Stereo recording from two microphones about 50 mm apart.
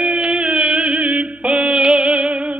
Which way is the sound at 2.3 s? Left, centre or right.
Right.